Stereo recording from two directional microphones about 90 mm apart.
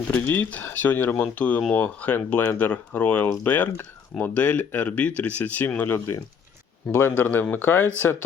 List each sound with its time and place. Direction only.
0.3 s speech: 20° left (ahead or behind)